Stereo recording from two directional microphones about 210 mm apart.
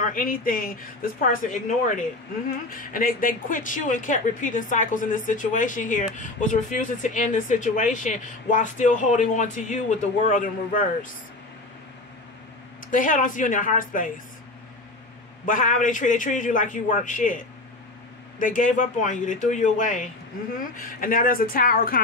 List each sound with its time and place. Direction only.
0.0 s speech: 40° left (ahead or behind)
2.9 s speech: 40° left (ahead or behind)
12.9 s speech: 40° left (ahead or behind)
15.4 s speech: 40° left (ahead or behind)